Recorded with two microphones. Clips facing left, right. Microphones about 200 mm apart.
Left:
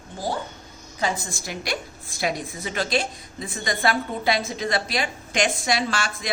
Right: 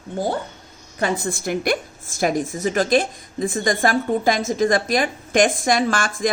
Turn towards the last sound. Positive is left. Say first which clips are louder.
# right 6 dB
turn(degrees=-50)  # may be behind; listen again after turning